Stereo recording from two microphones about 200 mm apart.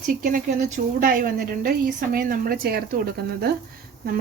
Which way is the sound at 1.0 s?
45° right (ahead or behind).